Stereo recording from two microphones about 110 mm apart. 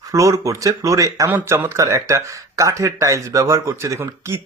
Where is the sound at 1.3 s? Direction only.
20° right (ahead or behind).